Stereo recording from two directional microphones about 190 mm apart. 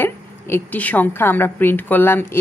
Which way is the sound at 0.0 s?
10° left (ahead or behind).